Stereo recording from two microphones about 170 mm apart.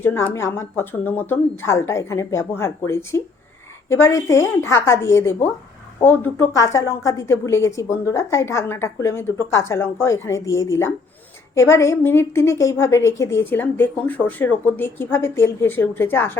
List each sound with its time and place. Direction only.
0.0 s a woman's voice: 15° left (ahead or behind)